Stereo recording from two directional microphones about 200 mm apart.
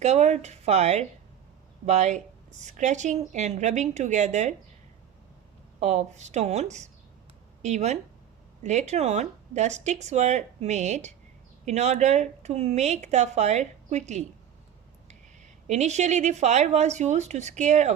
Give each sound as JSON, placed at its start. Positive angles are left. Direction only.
{"t": 0.0, "sound": "speech", "side_deg": -35}
{"t": 5.8, "sound": "speech", "side_deg": -35}
{"t": 15.6, "sound": "speech", "side_deg": -35}